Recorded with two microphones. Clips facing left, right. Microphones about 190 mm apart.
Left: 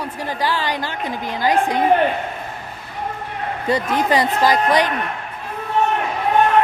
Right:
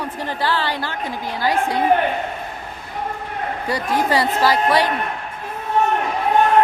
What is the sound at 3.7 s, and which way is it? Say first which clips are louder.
A man's voice: left 2 dB; 20° left (ahead or behind).